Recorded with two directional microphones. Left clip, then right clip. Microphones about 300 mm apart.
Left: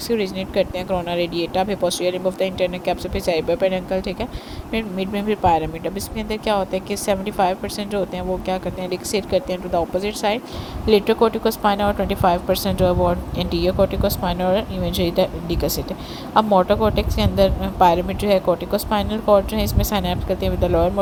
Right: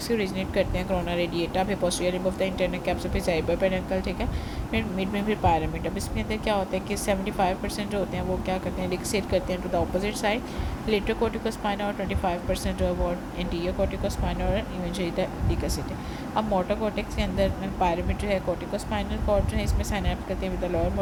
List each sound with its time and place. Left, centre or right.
0.1 s speech: left